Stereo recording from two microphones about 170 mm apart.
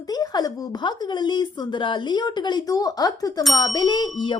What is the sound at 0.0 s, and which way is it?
A woman's voice, 20° left (ahead or behind).